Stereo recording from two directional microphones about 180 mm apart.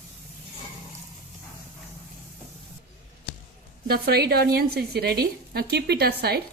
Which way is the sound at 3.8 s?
60° right (ahead or behind).